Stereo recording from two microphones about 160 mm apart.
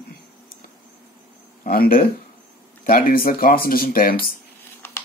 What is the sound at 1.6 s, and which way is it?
Speech, 65° left (ahead or behind).